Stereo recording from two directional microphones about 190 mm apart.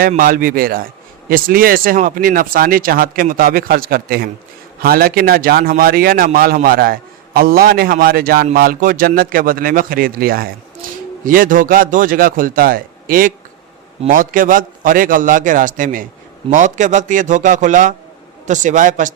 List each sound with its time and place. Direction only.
0.1 s a man's voice: 45° right (ahead or behind)